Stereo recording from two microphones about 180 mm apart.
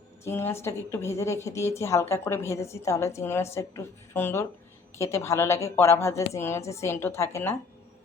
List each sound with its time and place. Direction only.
0.3 s a woman's voice: 15° left (ahead or behind)